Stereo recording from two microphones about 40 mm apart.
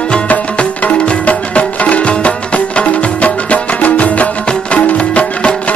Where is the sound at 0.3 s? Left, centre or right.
Left.